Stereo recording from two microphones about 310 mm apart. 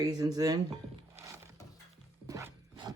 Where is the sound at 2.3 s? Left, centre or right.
Centre.